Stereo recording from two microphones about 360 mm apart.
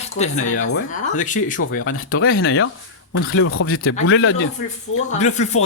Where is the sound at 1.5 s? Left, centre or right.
Left.